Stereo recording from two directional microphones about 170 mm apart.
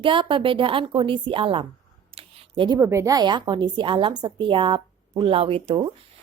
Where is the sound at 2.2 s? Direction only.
30° right (ahead or behind).